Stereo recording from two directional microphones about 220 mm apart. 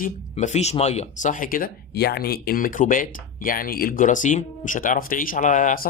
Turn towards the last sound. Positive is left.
turn(degrees=40)  # may be behind; listen again after turning